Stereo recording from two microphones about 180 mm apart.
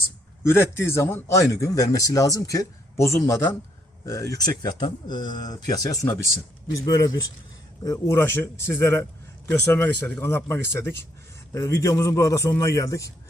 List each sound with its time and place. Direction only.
0.4 s speech: 15° left (ahead or behind)